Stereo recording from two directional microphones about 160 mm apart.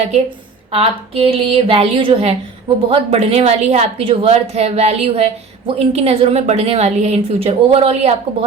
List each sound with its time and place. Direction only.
0.7 s speech: 35° right (ahead or behind)